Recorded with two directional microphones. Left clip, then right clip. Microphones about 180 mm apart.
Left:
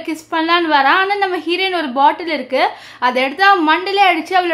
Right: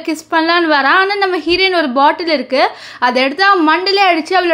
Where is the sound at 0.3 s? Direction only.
25° right (ahead or behind).